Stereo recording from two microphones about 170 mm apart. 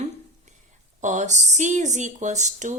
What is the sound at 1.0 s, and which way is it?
A woman's voice, 45° right (ahead or behind).